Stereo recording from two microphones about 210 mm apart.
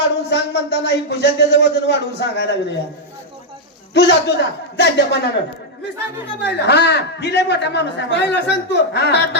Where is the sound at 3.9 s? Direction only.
55° left (ahead or behind).